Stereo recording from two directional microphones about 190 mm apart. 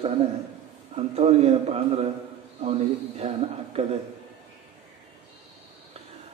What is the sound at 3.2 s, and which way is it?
Speech, 30° right (ahead or behind).